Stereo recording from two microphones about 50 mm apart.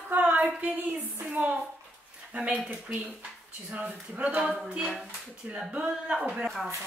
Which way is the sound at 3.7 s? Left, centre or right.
Right.